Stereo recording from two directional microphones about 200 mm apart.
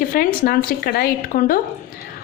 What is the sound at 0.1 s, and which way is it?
Speech, 45° left (ahead or behind).